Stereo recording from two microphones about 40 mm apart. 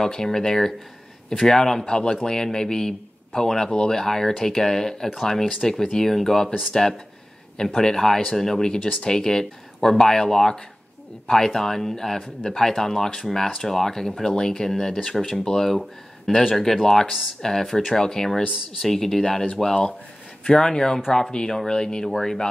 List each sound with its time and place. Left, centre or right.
0.0 s a man's voice: centre
4.0 s speech: centre
22.1 s speech: centre